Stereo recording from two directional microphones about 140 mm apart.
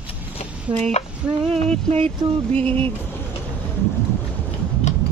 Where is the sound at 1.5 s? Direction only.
45° right (ahead or behind).